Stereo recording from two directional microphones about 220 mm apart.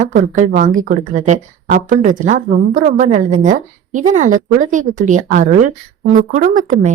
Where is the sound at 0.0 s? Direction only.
35° right (ahead or behind).